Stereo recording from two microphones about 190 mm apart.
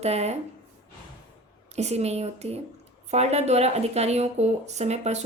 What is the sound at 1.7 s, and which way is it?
Speech, 35° right (ahead or behind).